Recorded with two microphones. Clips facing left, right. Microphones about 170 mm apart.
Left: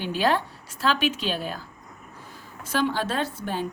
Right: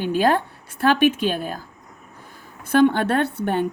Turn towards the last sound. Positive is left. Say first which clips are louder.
# right 7 dB
turn(degrees=-65)  # may be behind; listen again after turning